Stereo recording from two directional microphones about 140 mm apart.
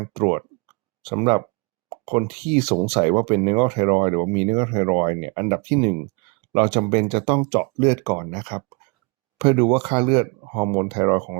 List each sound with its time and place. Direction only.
0.0 s speech: 40° right (ahead or behind)